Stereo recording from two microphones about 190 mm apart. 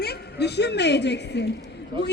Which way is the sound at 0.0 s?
60° left (ahead or behind).